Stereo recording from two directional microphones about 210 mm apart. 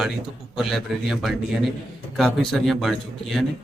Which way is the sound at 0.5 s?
Centre (ahead or behind).